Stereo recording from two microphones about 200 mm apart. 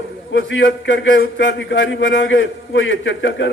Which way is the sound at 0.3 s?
75° left (ahead or behind).